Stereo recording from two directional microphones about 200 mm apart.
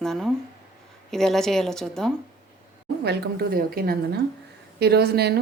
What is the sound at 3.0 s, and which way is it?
A woman's voice, 50° right (ahead or behind).